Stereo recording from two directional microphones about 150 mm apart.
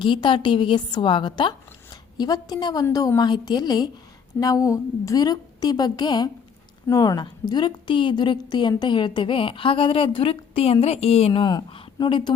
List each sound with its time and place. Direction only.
0.0 s a woman's voice: 35° left (ahead or behind)